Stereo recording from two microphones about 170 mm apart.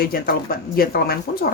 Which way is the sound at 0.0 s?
60° left (ahead or behind).